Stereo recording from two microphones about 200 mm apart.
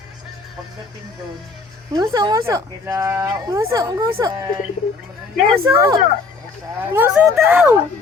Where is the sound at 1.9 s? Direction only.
20° right (ahead or behind).